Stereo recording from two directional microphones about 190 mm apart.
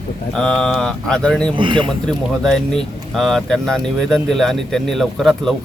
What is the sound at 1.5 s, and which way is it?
Speech, 25° right (ahead or behind).